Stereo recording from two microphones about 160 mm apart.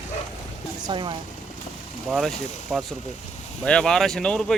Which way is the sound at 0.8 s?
30° right (ahead or behind).